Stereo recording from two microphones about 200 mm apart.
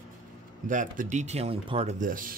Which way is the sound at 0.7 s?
40° right (ahead or behind).